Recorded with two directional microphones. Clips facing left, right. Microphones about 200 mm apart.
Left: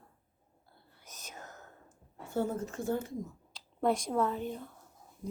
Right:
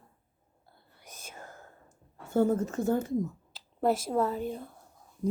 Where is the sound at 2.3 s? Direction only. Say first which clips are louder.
Right 7 dB; 45° right (ahead or behind).